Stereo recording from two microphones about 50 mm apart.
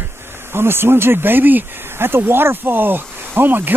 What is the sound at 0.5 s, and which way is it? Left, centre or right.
Speech, right.